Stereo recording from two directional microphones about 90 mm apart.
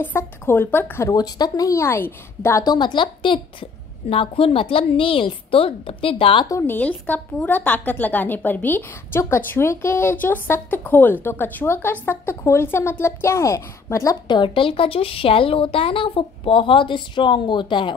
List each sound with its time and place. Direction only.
0.0 s a woman's voice: 25° left (ahead or behind)
1.0 s a woman's voice: 45° left (ahead or behind); by 2.6 s 30° left (ahead or behind)
2.6 s speech: 55° left (ahead or behind)
4.1 s a woman's voice: 90° left
6.6 s a woman's voice: 20° left (ahead or behind)
14.2 s a woman's voice: 60° left (ahead or behind)